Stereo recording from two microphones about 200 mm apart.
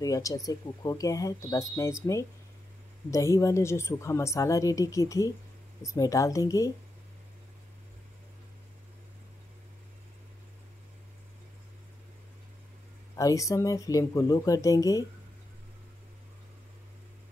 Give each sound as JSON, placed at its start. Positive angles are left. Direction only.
{"t": 0.0, "sound": "speech", "side_deg": 15}
{"t": 13.1, "sound": "speech", "side_deg": 15}